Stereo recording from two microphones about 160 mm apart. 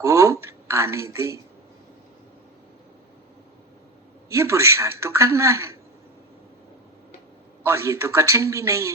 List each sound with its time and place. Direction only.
0.0 s a sound: 20° right (ahead or behind)
0.4 s a woman's voice: 15° right (ahead or behind)
4.3 s a woman's voice: 15° right (ahead or behind)
7.6 s a woman's voice: 15° right (ahead or behind)